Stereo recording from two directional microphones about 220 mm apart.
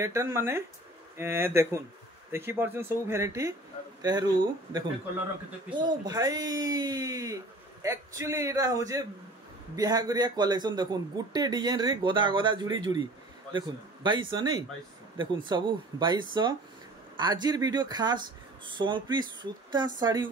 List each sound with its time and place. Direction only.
0.0 s a man's voice: 10° right (ahead or behind)
5.8 s a man's voice: 20° right (ahead or behind)